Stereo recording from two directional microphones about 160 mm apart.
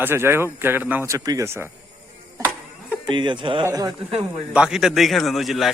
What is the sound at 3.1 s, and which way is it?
Speech, 30° right (ahead or behind).